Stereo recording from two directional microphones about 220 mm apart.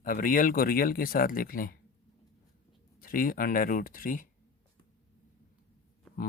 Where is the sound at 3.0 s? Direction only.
40° left (ahead or behind).